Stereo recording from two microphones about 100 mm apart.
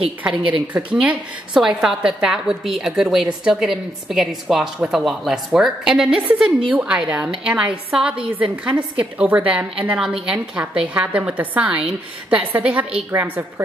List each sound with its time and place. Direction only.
0.9 s a woman's voice: 5° right (ahead or behind); by 13.5 s 20° right (ahead or behind)